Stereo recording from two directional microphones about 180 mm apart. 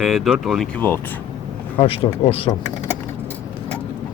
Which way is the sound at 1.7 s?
30° left (ahead or behind).